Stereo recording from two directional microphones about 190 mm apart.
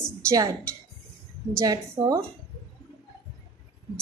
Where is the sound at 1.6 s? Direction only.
20° right (ahead or behind).